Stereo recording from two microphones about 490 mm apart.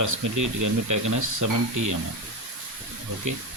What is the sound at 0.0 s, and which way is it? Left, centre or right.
Speech, right.